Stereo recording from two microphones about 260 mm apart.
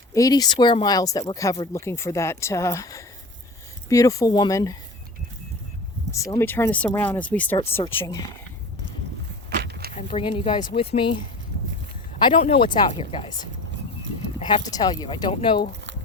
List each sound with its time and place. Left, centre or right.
0.1 s speech: centre
6.1 s speech: centre
9.6 s a sound: right
9.9 s speech: left
12.2 s speech: left
14.3 s speech: centre